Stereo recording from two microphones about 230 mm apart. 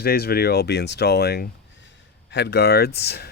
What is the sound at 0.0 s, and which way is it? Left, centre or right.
Speech, left.